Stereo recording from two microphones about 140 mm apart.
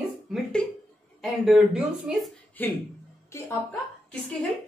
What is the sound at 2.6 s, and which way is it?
Speech, 15° left (ahead or behind).